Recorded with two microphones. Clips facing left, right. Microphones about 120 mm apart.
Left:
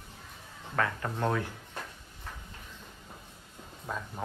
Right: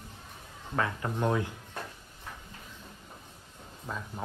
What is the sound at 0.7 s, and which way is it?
Speech, 20° right (ahead or behind).